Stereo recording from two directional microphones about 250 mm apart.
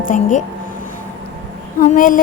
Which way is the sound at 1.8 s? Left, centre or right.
Left.